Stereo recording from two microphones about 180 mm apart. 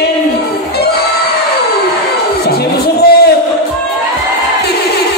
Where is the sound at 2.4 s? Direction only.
60° left (ahead or behind).